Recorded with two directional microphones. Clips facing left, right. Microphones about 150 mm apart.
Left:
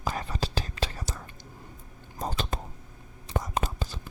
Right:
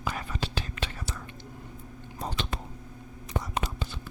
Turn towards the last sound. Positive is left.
turn(degrees=40)  # may be behind; listen again after turning